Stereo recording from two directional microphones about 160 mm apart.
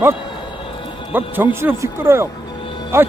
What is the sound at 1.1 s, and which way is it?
Speech, 10° right (ahead or behind).